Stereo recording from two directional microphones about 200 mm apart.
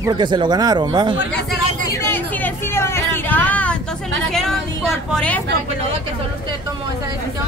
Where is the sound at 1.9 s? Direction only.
10° left (ahead or behind).